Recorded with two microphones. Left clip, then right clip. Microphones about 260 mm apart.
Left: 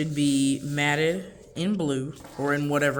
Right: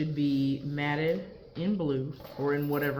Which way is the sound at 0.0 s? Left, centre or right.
Left.